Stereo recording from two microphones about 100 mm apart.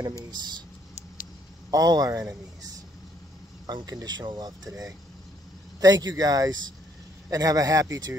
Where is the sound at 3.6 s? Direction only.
40° right (ahead or behind).